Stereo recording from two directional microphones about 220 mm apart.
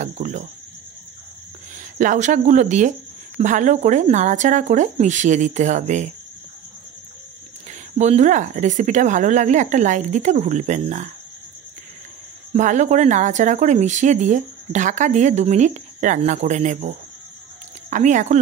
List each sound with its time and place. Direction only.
0.0 s speech: 35° right (ahead or behind)
2.0 s speech: 35° right (ahead or behind)
8.0 s speech: 30° right (ahead or behind)
12.5 s speech: 35° right (ahead or behind)